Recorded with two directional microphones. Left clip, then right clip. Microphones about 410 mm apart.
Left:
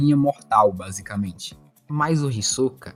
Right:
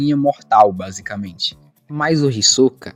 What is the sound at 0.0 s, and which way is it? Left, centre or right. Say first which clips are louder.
Speech: right 3 dB; left.